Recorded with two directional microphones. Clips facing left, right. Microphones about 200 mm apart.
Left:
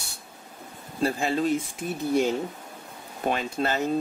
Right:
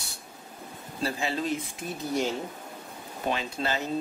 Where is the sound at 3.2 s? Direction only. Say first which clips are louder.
Left 3 dB; 50° left (ahead or behind).